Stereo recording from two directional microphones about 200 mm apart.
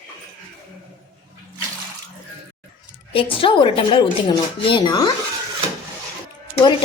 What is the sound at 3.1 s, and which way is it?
A woman's voice, 25° left (ahead or behind).